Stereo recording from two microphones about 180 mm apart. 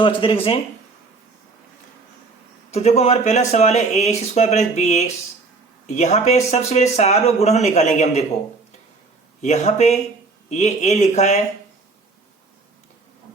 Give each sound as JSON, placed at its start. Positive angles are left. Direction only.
{"t": 0.0, "sound": "speech", "side_deg": 30}
{"t": 2.7, "sound": "speech", "side_deg": 35}
{"t": 9.4, "sound": "speech", "side_deg": 40}